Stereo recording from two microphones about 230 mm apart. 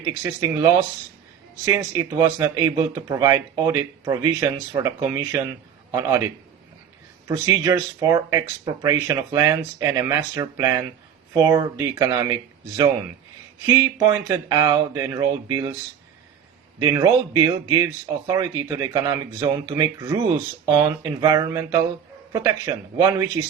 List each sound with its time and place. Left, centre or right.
0.1 s speech: centre
7.3 s speech: centre
16.8 s speech: centre